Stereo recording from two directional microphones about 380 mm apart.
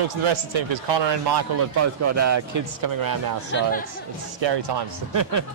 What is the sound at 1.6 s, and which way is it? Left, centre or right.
A man's voice, right.